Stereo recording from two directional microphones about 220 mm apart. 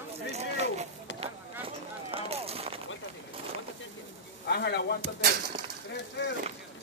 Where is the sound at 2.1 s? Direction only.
25° right (ahead or behind).